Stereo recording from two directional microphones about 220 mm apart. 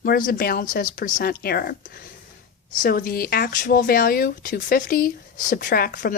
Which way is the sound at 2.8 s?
40° left (ahead or behind).